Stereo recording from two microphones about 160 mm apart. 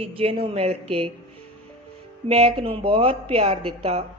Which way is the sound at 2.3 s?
35° right (ahead or behind).